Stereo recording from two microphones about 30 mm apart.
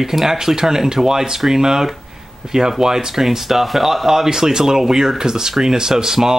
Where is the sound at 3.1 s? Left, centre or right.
Centre.